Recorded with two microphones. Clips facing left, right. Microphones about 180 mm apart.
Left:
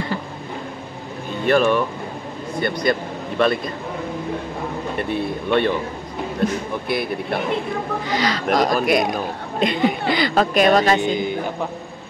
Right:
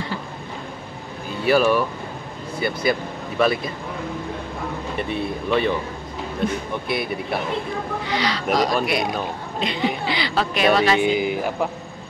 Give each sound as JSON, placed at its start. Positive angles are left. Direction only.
{"t": 1.4, "sound": "speech", "side_deg": -5}
{"t": 4.9, "sound": "speech", "side_deg": 0}
{"t": 8.1, "sound": "a woman's voice", "side_deg": 45}
{"t": 11.0, "sound": "speech", "side_deg": -10}